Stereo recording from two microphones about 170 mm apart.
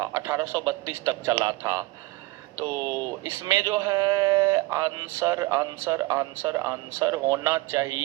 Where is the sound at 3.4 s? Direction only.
20° right (ahead or behind).